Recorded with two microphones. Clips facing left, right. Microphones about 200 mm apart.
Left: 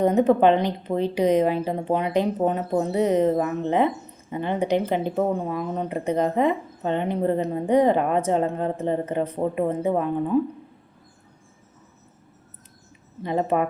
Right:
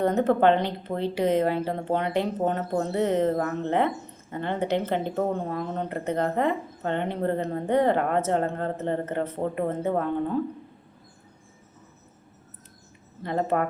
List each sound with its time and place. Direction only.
0.0 s a woman's voice: 15° left (ahead or behind)
13.2 s a woman's voice: 15° left (ahead or behind)